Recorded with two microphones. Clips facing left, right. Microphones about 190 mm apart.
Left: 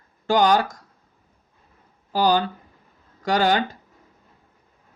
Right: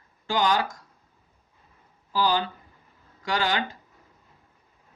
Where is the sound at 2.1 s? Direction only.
45° left (ahead or behind).